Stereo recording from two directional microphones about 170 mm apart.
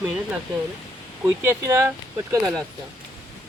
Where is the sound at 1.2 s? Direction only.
15° right (ahead or behind).